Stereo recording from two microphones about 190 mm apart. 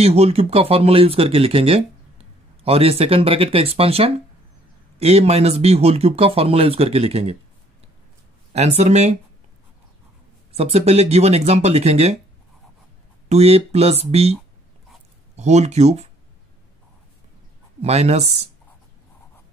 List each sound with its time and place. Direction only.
0.0 s speech: 35° right (ahead or behind)
8.5 s speech: 35° right (ahead or behind)
10.5 s speech: 35° right (ahead or behind)
13.3 s speech: 35° right (ahead or behind)
15.3 s speech: 35° right (ahead or behind)
17.8 s speech: 35° right (ahead or behind)